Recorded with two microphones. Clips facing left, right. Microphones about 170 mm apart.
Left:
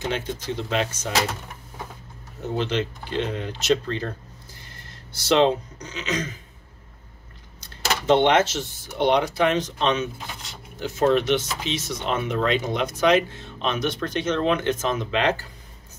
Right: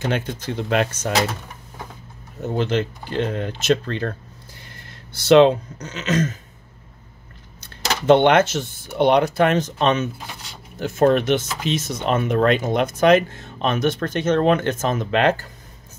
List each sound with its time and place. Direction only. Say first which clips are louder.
0.1 s speech: right 3 dB; 55° right (ahead or behind)
2.5 s speech: right 3 dB; 45° right (ahead or behind)
5.1 s speech: right 6 dB; 60° right (ahead or behind)
8.1 s speech: right 4 dB; 55° right (ahead or behind)